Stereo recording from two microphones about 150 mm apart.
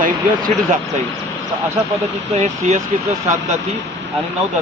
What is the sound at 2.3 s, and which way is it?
Speech, 45° right (ahead or behind).